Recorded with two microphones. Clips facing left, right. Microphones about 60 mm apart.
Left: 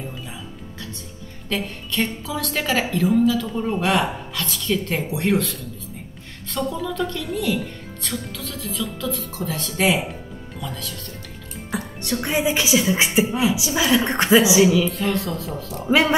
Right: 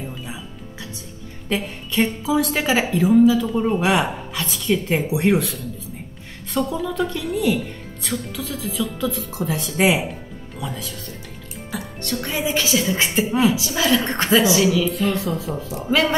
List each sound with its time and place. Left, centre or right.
1.5 s speech: centre
11.7 s music: centre
12.4 s a woman's voice: centre
14.9 s speech: centre
15.9 s a woman's voice: centre